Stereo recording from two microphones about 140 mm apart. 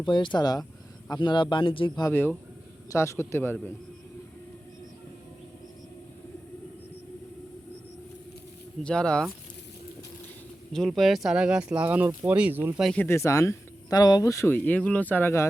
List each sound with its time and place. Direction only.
0.0 s speech: 35° left (ahead or behind)
2.0 s a man's voice: 15° left (ahead or behind)
8.8 s speech: 5° left (ahead or behind)
10.7 s speech: centre (ahead or behind); by 12.8 s 15° right (ahead or behind)
12.8 s a man's voice: 5° left (ahead or behind)
13.1 s speech: 20° left (ahead or behind)